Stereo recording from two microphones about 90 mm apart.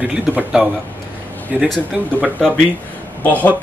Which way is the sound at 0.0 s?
20° right (ahead or behind).